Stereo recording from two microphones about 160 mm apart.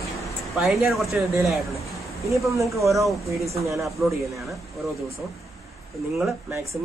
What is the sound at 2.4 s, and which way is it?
Speech, 20° right (ahead or behind).